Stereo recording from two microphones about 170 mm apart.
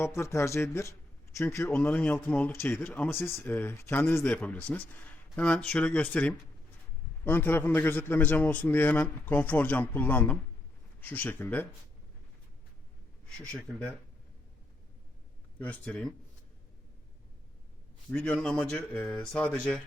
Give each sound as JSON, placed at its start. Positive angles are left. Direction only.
{"t": 0.0, "sound": "speech", "side_deg": 15}
{"t": 13.4, "sound": "speech", "side_deg": 5}
{"t": 15.5, "sound": "speech", "side_deg": 10}
{"t": 18.1, "sound": "speech", "side_deg": 5}